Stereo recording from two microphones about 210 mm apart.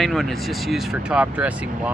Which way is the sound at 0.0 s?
Centre (ahead or behind).